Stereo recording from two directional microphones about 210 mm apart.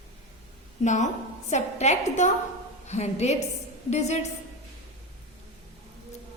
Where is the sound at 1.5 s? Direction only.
35° left (ahead or behind).